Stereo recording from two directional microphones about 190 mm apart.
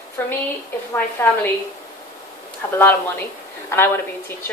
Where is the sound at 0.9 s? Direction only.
10° left (ahead or behind).